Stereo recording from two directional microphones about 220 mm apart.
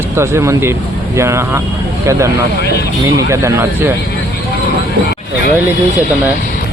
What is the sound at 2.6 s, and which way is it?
Speech, 50° left (ahead or behind).